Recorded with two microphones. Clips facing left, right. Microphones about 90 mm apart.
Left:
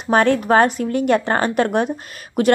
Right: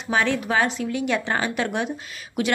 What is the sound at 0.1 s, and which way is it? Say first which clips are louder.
A woman's voice: left 7 dB; 50° left (ahead or behind).